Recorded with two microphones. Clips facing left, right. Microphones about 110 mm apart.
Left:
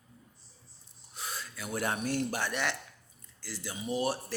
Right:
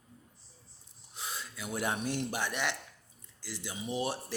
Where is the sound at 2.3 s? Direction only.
15° right (ahead or behind).